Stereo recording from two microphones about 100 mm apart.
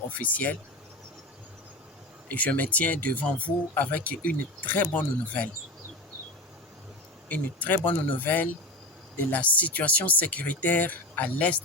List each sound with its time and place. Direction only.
0.2 s speech: 15° left (ahead or behind)
2.3 s speech: 15° left (ahead or behind)
7.3 s speech: 15° left (ahead or behind)